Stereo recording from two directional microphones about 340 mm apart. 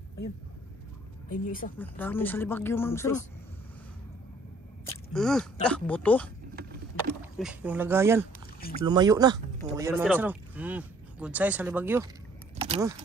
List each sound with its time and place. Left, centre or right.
1.3 s speech: left
1.8 s speech: centre
4.8 s speech: centre
12.5 s a sound: centre